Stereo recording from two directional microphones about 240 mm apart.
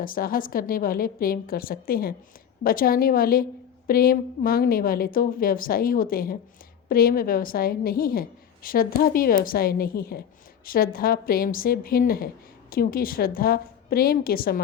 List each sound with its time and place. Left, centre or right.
0.0 s a woman's voice: left